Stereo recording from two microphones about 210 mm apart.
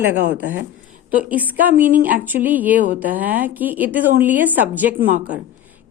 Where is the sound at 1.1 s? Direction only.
5° right (ahead or behind).